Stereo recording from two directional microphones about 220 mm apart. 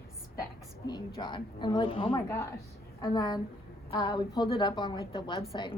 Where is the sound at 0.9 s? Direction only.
20° left (ahead or behind).